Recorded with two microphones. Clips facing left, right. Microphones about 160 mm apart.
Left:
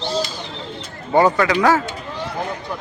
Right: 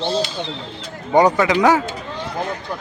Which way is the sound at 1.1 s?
15° right (ahead or behind).